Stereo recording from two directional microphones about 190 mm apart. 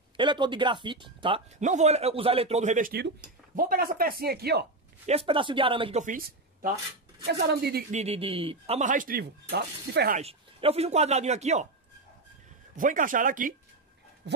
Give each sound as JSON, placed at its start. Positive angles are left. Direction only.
{"t": 0.2, "sound": "speech", "side_deg": -25}
{"t": 1.6, "sound": "speech", "side_deg": -40}
{"t": 5.0, "sound": "speech", "side_deg": -30}
{"t": 6.0, "sound": "speech", "side_deg": -45}
{"t": 7.2, "sound": "a woman's voice", "side_deg": -55}
{"t": 7.9, "sound": "speech", "side_deg": -35}
{"t": 10.1, "sound": "speech", "side_deg": -30}
{"t": 12.7, "sound": "speech", "side_deg": -45}
{"t": 14.2, "sound": "dog", "side_deg": -65}